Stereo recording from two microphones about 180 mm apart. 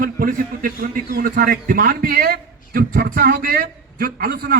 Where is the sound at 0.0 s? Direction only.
50° right (ahead or behind).